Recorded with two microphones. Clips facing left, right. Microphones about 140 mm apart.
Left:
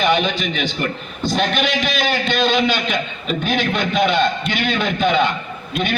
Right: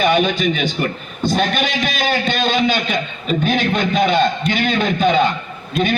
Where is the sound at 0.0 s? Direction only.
45° right (ahead or behind).